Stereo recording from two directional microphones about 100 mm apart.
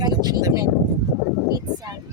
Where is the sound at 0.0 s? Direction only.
40° right (ahead or behind).